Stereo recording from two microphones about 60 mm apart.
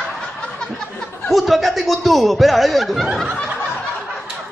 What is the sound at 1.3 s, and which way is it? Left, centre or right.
Speech, centre.